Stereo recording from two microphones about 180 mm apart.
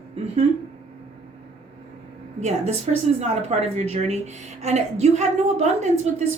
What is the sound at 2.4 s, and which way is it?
A woman's voice, 40° right (ahead or behind).